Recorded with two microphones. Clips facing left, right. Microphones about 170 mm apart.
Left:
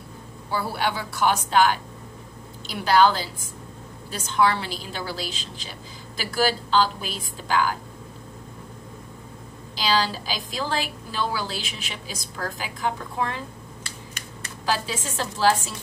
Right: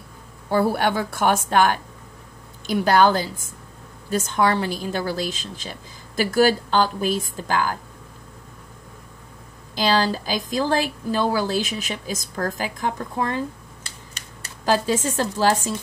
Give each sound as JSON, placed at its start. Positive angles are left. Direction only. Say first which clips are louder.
{"t": 0.5, "sound": "a woman's voice", "louder": "right 7 dB", "side_deg": -50}
{"t": 9.8, "sound": "a woman's voice", "louder": "right 4 dB", "side_deg": -50}
{"t": 14.9, "sound": "a woman's voice", "louder": "right 8 dB", "side_deg": -45}